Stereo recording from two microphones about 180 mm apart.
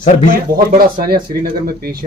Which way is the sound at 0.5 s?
55° right (ahead or behind).